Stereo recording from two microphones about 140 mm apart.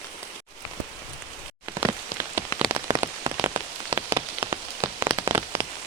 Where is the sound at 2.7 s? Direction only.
30° right (ahead or behind).